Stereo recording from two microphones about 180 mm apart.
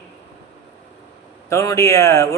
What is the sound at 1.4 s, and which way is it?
Speech, 15° left (ahead or behind).